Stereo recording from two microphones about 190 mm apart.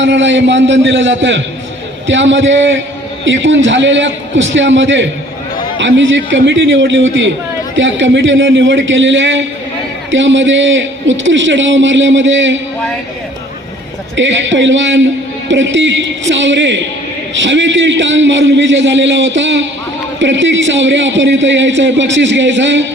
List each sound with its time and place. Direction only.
0.0 s a man's voice: 70° right (ahead or behind)
14.2 s a man's voice: 75° right (ahead or behind)